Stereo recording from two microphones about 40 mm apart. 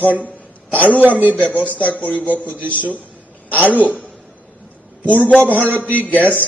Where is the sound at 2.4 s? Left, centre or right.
Left.